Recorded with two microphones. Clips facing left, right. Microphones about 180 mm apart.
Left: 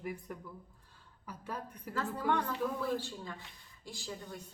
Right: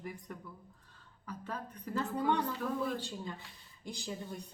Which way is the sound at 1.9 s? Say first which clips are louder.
Right 2 dB; 20° right (ahead or behind).